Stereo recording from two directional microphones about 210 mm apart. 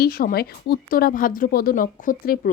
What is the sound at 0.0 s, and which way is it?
Speech, 45° left (ahead or behind).